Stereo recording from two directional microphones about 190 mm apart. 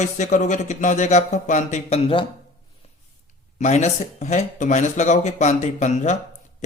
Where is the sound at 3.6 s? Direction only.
35° left (ahead or behind).